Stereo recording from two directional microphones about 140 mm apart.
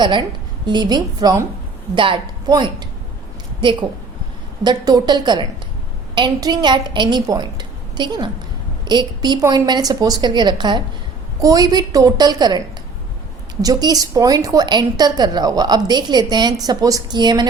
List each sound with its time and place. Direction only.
0.0 s a woman's voice: 35° right (ahead or behind)